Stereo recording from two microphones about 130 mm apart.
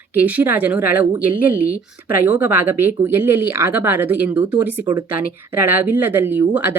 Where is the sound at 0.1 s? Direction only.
10° right (ahead or behind).